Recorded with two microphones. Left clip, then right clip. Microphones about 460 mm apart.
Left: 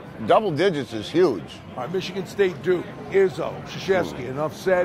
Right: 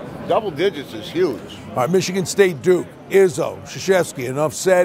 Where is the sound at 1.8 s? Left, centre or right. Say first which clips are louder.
Right 9 dB; right.